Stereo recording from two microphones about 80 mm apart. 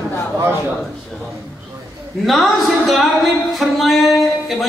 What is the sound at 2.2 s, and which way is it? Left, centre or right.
Speech, centre.